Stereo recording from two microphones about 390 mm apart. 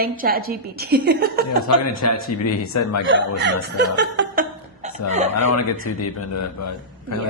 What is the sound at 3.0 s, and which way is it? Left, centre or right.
Speech, right.